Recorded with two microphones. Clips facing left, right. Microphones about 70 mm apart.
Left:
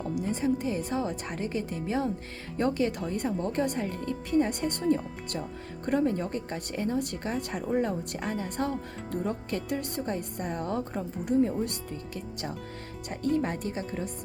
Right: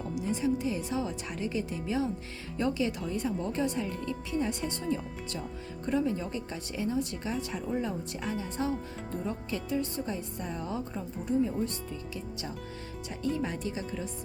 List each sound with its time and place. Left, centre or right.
0.2 s speech: left
13.2 s speech: left